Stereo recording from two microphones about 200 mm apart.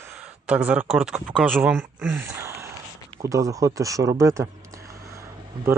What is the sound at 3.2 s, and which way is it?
Speech, 15° right (ahead or behind).